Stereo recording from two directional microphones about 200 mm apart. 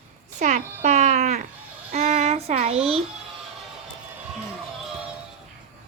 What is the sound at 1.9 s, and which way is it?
Child singing, 35° right (ahead or behind).